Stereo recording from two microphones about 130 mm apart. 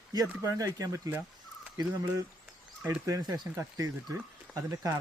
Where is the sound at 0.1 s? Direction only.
30° right (ahead or behind).